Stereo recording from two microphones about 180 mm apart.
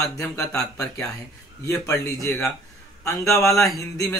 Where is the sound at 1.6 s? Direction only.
15° left (ahead or behind).